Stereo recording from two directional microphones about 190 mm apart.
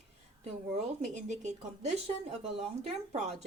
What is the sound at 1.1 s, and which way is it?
Speech, 40° right (ahead or behind).